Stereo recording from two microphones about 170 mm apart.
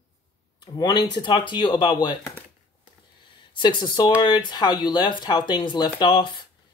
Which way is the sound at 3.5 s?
25° left (ahead or behind).